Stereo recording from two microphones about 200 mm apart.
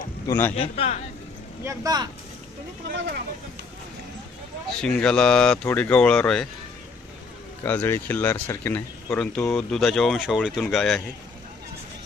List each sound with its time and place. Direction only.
0.3 s speech: 10° left (ahead or behind)
0.5 s a man's voice: 30° left (ahead or behind)
1.6 s speech: 20° right (ahead or behind)
4.8 s speech: 5° left (ahead or behind)
7.6 s speech: 10° left (ahead or behind)